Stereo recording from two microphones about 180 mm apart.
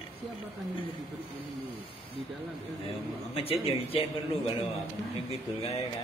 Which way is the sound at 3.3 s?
35° left (ahead or behind).